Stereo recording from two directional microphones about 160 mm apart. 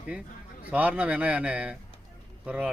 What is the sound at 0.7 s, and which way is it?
A man's voice, 10° right (ahead or behind).